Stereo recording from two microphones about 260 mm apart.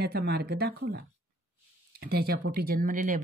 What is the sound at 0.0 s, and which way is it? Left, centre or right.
Speech, right.